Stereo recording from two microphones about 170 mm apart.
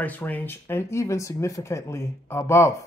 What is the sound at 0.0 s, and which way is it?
Speech, 10° left (ahead or behind).